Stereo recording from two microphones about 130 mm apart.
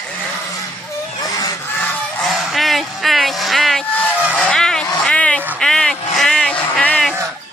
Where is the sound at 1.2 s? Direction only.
30° left (ahead or behind).